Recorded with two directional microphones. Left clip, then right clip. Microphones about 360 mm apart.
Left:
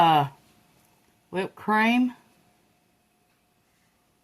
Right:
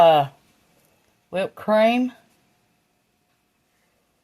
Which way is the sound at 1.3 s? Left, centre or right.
Right.